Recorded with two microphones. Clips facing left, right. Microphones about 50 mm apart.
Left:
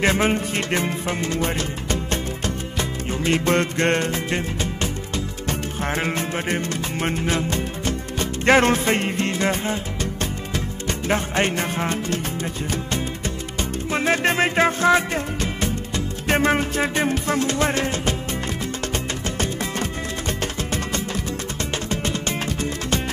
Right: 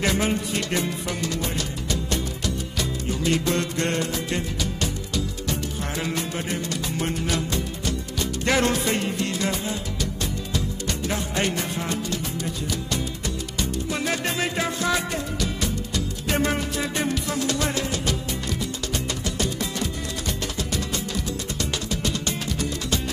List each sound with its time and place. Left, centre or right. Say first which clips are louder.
0.0 s music: left 4 dB; left
13.6 s music: left 3 dB; left
19.2 s music: left 2 dB; left